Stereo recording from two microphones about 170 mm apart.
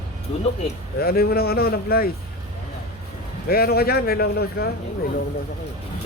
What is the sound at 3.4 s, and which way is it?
Speech, 65° left (ahead or behind).